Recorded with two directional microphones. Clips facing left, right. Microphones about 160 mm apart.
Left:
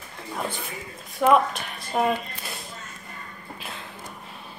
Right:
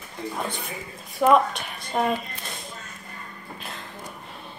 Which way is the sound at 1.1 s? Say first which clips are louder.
Right 1 dB; centre (ahead or behind).